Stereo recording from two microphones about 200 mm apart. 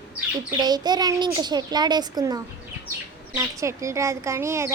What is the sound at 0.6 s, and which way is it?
A child's voice, 20° right (ahead or behind).